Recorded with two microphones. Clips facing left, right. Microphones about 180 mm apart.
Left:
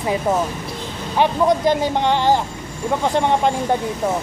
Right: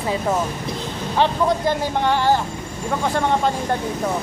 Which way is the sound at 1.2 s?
20° left (ahead or behind).